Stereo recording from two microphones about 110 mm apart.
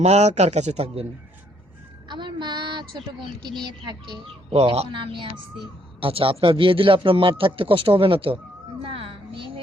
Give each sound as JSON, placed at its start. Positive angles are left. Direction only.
{"t": 0.0, "sound": "speech", "side_deg": -90}
{"t": 2.0, "sound": "a man's voice", "side_deg": -45}
{"t": 4.5, "sound": "speech", "side_deg": -70}
{"t": 4.9, "sound": "a man's voice", "side_deg": -50}
{"t": 8.8, "sound": "a sound", "side_deg": -55}